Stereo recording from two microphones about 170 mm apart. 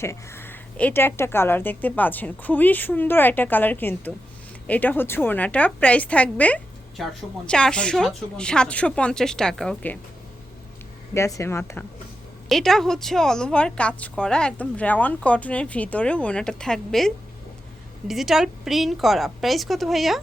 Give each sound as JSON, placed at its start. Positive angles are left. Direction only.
{"t": 0.0, "sound": "a woman's voice", "side_deg": 15}
{"t": 11.1, "sound": "a woman's voice", "side_deg": 15}
{"t": 12.5, "sound": "a woman's voice", "side_deg": 0}
{"t": 18.1, "sound": "a woman's voice", "side_deg": 0}